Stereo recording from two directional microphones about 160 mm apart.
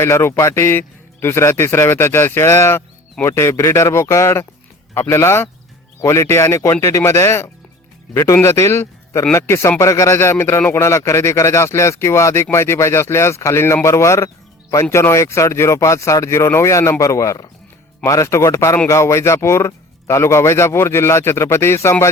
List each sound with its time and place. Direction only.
0.0 s a man's voice: 15° left (ahead or behind)